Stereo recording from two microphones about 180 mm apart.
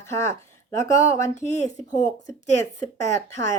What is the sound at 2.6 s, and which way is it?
Speech, 15° left (ahead or behind).